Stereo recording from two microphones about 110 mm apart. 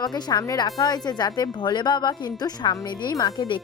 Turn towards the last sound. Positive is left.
turn(degrees=40)  # may be behind; listen again after turning